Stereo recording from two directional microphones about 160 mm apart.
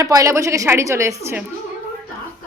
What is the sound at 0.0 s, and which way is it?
A woman's voice, 20° right (ahead or behind).